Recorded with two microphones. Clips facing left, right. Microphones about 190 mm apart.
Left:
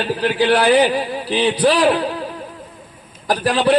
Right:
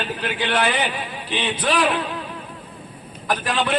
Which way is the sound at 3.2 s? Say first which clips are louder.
Left 7 dB; 35° left (ahead or behind).